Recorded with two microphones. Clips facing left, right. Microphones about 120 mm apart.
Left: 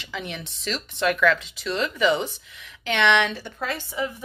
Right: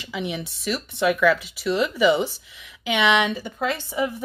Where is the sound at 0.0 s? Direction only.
10° right (ahead or behind).